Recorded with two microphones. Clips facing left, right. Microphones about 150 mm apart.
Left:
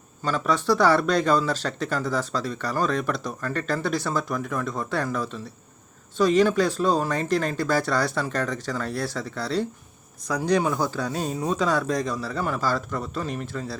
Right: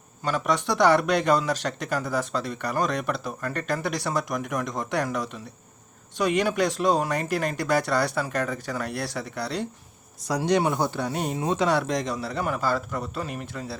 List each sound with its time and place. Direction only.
0.3 s speech: 15° right (ahead or behind)
10.2 s speech: 25° right (ahead or behind)